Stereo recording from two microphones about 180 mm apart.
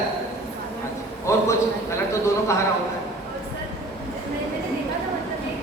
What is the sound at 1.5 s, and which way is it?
A man's voice, 15° left (ahead or behind).